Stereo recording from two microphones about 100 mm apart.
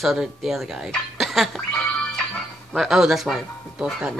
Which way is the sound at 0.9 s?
Centre (ahead or behind).